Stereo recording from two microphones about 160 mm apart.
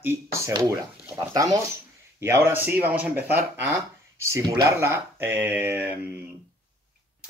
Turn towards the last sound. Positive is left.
turn(degrees=-10)  # may be behind; listen again after turning